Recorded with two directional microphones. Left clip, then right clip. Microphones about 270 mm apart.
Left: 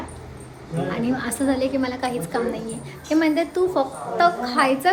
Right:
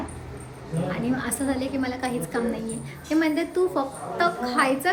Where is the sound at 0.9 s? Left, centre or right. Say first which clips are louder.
Left 2 dB; centre.